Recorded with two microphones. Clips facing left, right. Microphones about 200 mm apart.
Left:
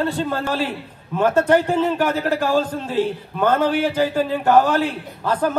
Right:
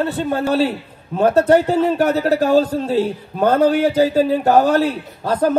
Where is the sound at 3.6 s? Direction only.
40° right (ahead or behind).